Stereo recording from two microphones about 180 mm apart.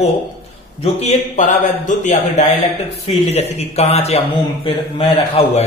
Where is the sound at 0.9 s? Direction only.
40° left (ahead or behind).